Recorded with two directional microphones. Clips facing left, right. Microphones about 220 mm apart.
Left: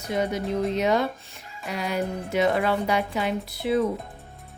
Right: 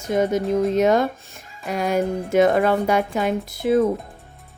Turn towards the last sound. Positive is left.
turn(degrees=-45)  # may be behind; listen again after turning